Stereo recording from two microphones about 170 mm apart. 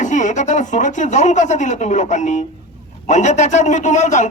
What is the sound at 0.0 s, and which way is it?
A man's voice, 45° left (ahead or behind).